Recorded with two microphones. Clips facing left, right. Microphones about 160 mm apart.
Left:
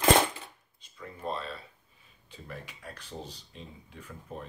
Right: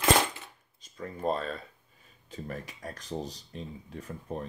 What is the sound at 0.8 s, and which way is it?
Speech, 40° right (ahead or behind).